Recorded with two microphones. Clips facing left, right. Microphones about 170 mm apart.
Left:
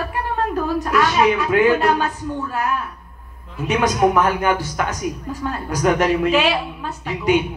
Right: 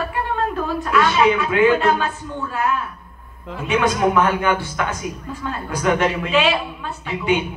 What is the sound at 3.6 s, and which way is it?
A man's voice, 40° left (ahead or behind).